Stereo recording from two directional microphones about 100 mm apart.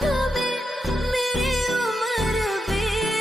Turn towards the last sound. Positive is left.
turn(degrees=0)  # may be behind; listen again after turning